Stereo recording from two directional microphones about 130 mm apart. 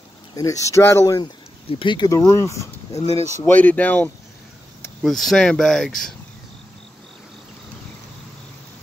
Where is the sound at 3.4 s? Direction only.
15° left (ahead or behind).